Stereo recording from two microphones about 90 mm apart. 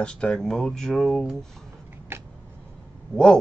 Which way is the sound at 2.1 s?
25° right (ahead or behind).